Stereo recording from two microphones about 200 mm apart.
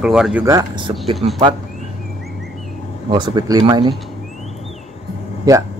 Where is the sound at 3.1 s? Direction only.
20° right (ahead or behind).